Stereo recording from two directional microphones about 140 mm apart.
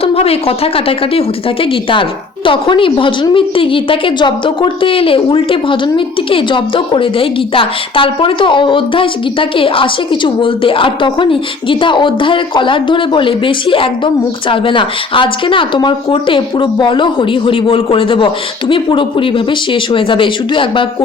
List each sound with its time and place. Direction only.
0.0 s a woman's voice: 45° left (ahead or behind)